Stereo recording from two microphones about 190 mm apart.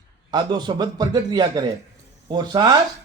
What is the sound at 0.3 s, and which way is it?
A man's voice, 20° right (ahead or behind).